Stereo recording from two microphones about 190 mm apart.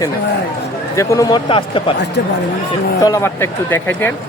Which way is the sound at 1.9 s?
60° left (ahead or behind).